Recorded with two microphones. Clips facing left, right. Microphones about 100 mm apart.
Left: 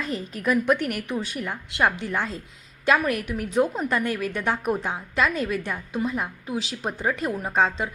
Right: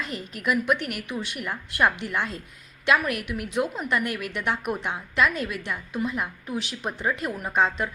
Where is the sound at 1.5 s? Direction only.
25° left (ahead or behind).